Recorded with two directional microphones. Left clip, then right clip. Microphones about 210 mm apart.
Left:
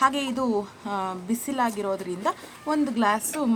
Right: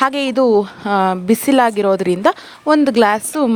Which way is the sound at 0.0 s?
40° right (ahead or behind).